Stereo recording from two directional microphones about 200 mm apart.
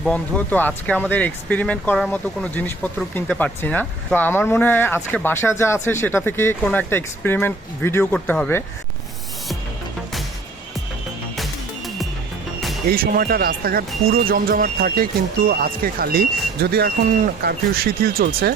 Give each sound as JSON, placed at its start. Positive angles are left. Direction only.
{"t": 0.0, "sound": "speech", "side_deg": 5}
{"t": 12.9, "sound": "speech", "side_deg": -45}